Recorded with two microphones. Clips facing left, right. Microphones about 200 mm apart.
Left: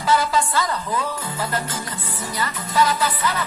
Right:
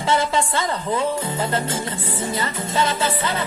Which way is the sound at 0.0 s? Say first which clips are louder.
Even; 25° right (ahead or behind).